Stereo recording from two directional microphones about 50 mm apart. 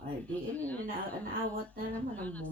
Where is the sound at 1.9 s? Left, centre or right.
Left.